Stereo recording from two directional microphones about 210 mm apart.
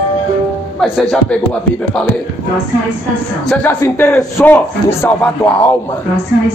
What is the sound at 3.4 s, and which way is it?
A man's voice, 5° left (ahead or behind).